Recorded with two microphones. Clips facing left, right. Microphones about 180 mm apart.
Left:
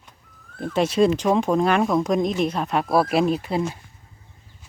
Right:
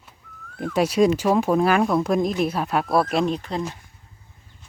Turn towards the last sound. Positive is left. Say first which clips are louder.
# left 3 dB
turn(degrees=10)  # may be behind; listen again after turning